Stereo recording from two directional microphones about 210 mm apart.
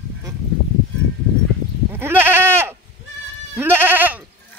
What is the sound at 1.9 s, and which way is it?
Goat, 10° right (ahead or behind).